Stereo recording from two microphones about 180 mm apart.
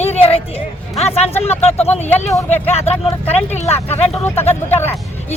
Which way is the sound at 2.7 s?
35° left (ahead or behind).